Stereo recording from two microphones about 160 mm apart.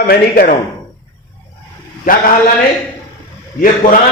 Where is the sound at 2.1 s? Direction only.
60° left (ahead or behind).